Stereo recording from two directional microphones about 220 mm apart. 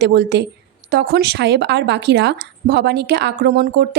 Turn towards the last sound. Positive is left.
turn(degrees=-50)  # may be behind; listen again after turning